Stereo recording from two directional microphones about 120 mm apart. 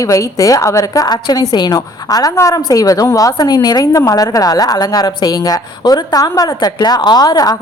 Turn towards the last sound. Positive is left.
turn(degrees=30)  # may be behind; listen again after turning